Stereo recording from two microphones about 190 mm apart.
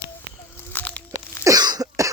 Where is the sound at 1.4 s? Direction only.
20° right (ahead or behind).